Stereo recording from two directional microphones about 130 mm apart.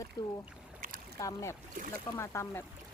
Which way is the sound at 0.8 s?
90° right.